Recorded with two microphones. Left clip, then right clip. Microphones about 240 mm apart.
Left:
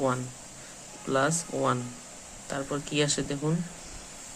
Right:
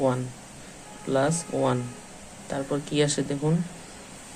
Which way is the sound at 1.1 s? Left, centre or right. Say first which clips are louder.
Right 2 dB; centre.